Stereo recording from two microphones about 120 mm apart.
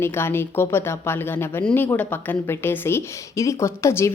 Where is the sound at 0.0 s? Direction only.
20° left (ahead or behind).